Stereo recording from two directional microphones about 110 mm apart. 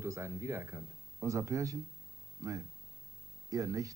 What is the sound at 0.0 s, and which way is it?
Speech, 25° right (ahead or behind).